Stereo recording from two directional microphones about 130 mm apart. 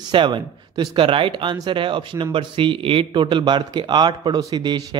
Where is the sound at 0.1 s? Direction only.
40° right (ahead or behind).